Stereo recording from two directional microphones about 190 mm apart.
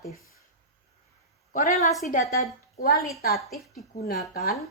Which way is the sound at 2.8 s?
50° left (ahead or behind).